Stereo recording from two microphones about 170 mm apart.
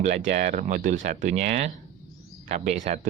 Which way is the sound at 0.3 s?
40° right (ahead or behind).